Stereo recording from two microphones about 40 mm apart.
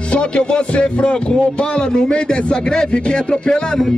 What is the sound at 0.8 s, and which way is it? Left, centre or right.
A man's voice, left.